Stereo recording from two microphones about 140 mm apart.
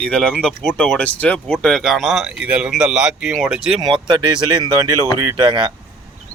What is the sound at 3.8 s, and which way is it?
Speech, 35° right (ahead or behind).